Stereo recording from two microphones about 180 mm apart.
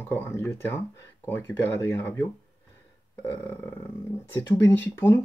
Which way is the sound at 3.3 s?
10° left (ahead or behind).